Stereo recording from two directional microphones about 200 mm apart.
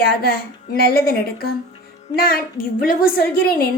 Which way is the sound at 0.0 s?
50° left (ahead or behind).